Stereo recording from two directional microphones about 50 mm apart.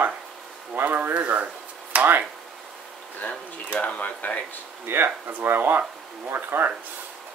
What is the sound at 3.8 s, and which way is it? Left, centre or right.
Speech, left.